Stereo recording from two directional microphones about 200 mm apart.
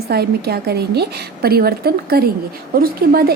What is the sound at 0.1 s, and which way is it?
Speech, 50° right (ahead or behind).